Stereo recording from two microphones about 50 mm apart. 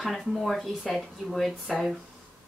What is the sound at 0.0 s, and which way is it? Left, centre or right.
Speech, centre.